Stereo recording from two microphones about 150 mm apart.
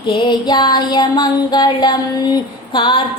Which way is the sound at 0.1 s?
30° left (ahead or behind).